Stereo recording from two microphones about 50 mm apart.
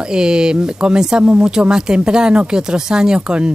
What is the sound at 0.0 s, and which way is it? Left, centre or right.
Speech, centre.